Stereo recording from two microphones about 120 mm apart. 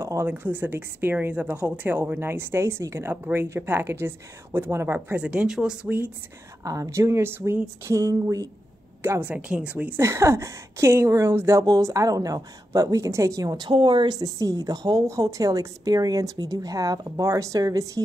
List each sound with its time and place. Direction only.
0.0 s a woman's voice: 20° right (ahead or behind)
6.6 s a woman's voice: 30° right (ahead or behind)
13.7 s a woman's voice: 40° right (ahead or behind)